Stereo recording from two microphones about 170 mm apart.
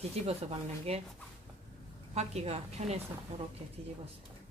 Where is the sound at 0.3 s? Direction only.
35° right (ahead or behind).